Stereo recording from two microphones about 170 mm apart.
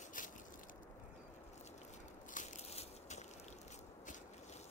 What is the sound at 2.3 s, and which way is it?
Crushing, 45° left (ahead or behind).